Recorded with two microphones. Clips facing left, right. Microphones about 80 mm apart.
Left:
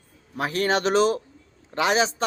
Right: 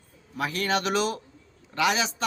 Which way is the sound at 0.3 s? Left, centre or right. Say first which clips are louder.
Left 3 dB; left.